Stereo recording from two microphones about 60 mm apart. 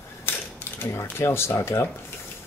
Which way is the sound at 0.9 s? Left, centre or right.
Left.